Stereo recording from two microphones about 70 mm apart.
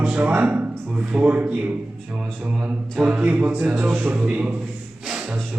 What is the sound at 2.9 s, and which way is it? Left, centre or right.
Speech, centre.